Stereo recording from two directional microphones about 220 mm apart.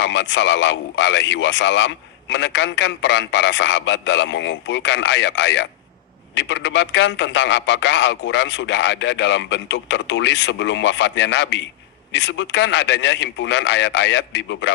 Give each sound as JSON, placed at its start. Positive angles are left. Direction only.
{"t": 0.0, "sound": "a man's voice", "side_deg": 55}